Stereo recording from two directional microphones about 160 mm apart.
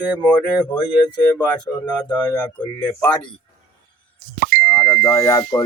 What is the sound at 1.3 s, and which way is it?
Speech, 10° left (ahead or behind).